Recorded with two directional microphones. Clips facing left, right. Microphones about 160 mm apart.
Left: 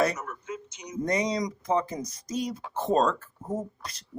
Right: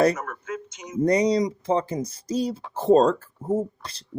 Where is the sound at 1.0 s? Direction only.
35° right (ahead or behind).